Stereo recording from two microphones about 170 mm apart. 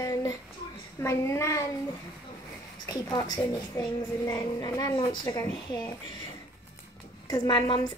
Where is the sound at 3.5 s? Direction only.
25° left (ahead or behind).